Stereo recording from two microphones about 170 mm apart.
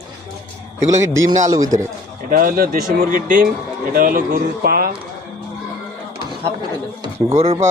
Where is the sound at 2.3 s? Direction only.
55° right (ahead or behind).